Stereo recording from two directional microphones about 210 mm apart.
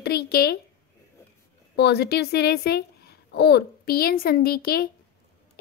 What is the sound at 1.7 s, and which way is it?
A woman's voice, 50° left (ahead or behind).